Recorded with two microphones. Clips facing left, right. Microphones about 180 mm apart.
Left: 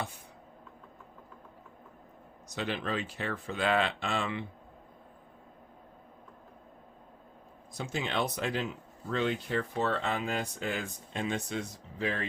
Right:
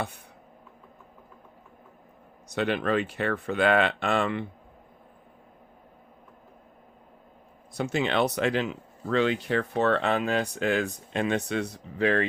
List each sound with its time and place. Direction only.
2.5 s speech: 60° right (ahead or behind)
7.7 s speech: 65° right (ahead or behind)